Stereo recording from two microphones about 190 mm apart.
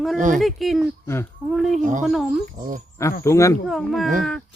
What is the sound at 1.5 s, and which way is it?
Speech, centre (ahead or behind).